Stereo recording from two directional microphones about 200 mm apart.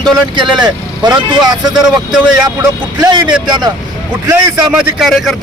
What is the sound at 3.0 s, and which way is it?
Speech, 20° right (ahead or behind).